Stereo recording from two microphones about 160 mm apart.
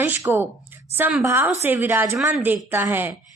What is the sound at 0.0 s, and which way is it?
A woman's voice, 15° right (ahead or behind).